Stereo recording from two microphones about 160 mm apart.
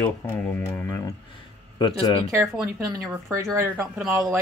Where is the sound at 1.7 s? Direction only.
30° left (ahead or behind).